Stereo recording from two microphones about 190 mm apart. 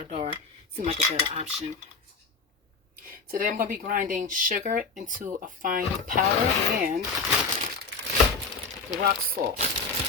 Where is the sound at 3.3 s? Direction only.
45° right (ahead or behind).